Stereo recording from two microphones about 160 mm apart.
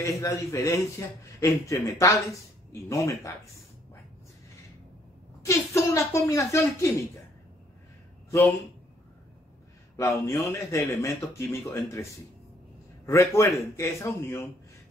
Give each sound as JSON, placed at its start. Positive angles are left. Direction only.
{"t": 0.0, "sound": "a woman's voice", "side_deg": 20}
{"t": 5.4, "sound": "a woman's voice", "side_deg": 20}
{"t": 8.3, "sound": "speech", "side_deg": 15}
{"t": 9.9, "sound": "a man's voice", "side_deg": 20}